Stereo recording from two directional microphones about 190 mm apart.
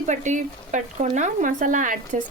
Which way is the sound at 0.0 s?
40° right (ahead or behind).